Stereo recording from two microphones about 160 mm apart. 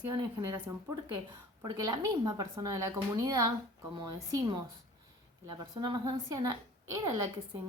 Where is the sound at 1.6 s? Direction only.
20° right (ahead or behind).